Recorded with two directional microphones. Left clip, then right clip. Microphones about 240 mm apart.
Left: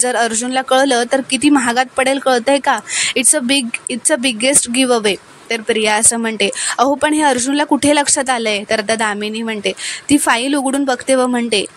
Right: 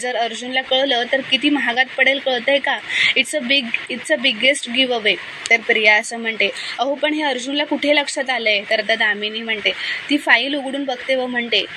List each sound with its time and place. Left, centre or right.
0.1 s a woman's voice: left